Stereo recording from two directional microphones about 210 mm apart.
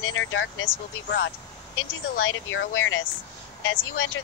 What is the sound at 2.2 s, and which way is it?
Speech, 70° left (ahead or behind).